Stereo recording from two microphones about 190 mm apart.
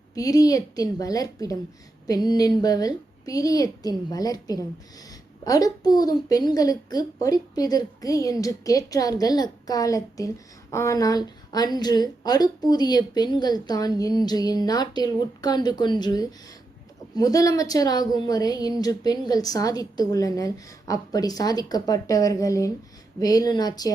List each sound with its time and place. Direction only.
0.1 s a woman's voice: 20° left (ahead or behind)